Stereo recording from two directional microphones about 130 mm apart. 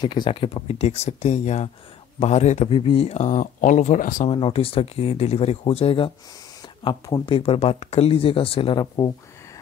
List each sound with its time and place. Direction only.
0.0 s a man's voice: 35° left (ahead or behind); by 2.7 s 60° left (ahead or behind)
2.7 s speech: 45° left (ahead or behind); by 4.3 s 80° left
4.3 s speech: 45° left (ahead or behind)
7.2 s speech: 45° left (ahead or behind)